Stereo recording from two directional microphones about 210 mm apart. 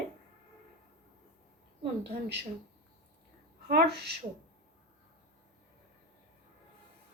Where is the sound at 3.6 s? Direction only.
50° right (ahead or behind).